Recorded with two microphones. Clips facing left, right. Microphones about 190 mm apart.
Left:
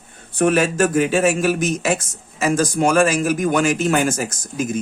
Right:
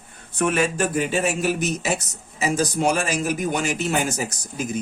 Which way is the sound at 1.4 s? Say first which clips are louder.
Left 4 dB; 50° left (ahead or behind).